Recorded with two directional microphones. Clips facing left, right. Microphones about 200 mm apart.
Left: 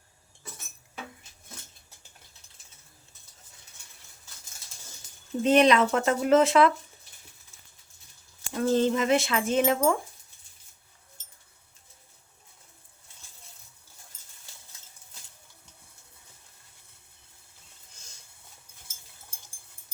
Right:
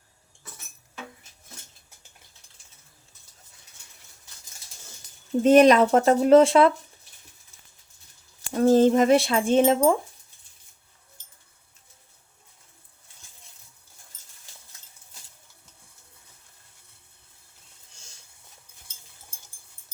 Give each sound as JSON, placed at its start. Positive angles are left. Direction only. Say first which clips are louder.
{"t": 5.4, "sound": "speech", "louder": "right 5 dB", "side_deg": -45}
{"t": 8.5, "sound": "speech", "louder": "right 7 dB", "side_deg": -45}